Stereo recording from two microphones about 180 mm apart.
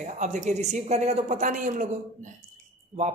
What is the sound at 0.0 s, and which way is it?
A woman's voice, 40° right (ahead or behind).